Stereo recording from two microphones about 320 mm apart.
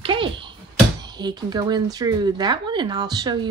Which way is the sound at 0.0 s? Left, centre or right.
Centre.